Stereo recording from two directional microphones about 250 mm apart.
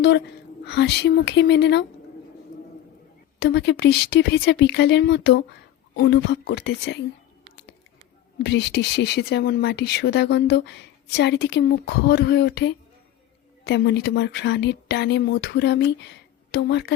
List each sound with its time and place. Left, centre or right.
0.0 s speech: left
3.4 s speech: left
8.4 s speech: left